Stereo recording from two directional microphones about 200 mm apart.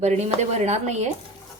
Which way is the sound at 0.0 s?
35° right (ahead or behind).